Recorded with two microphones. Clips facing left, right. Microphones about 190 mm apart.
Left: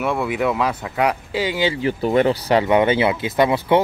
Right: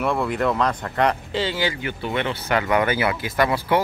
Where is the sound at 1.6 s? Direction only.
30° left (ahead or behind).